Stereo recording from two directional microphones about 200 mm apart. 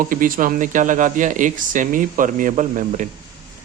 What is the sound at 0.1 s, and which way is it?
Speech, 45° right (ahead or behind).